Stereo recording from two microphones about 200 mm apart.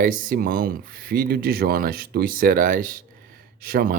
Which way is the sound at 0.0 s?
40° right (ahead or behind).